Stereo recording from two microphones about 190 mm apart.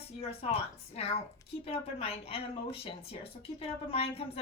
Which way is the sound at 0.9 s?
30° left (ahead or behind).